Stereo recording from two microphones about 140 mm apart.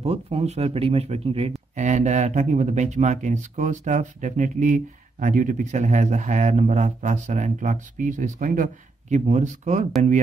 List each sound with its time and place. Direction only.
0.0 s speech: 45° right (ahead or behind)
1.8 s speech: 60° right (ahead or behind)
9.1 s speech: 55° right (ahead or behind)